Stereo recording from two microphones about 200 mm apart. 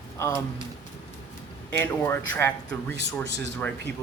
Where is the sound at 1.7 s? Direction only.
10° left (ahead or behind).